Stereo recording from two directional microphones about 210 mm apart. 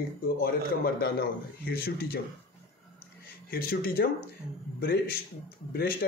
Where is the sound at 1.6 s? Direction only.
50° left (ahead or behind).